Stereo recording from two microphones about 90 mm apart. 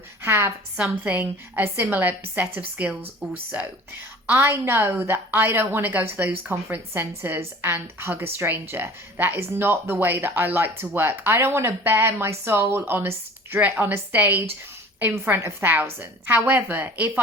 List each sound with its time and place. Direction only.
0.2 s a woman's voice: 25° right (ahead or behind)
0.8 s a woman's voice: 15° right (ahead or behind)
4.3 s a woman's voice: 25° right (ahead or behind)